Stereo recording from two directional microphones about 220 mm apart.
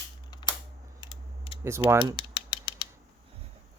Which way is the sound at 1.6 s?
10° right (ahead or behind).